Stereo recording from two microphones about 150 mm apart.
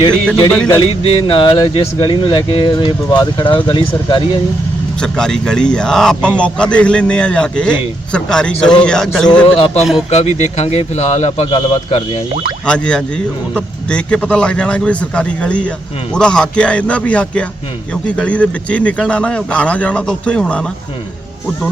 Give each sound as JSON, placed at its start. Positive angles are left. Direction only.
{"t": 0.3, "sound": "speech", "side_deg": 5}
{"t": 1.3, "sound": "speech", "side_deg": 35}
{"t": 4.9, "sound": "a man's voice", "side_deg": 5}
{"t": 9.6, "sound": "a man's voice", "side_deg": 40}
{"t": 12.6, "sound": "a man's voice", "side_deg": 5}